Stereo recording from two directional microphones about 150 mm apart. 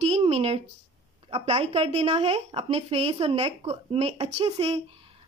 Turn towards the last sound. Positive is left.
turn(degrees=-45)  # may be behind; listen again after turning